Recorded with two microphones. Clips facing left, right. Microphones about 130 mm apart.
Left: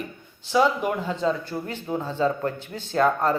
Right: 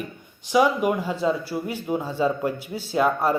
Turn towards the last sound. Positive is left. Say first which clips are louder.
# even
turn(degrees=-10)  # may be behind; listen again after turning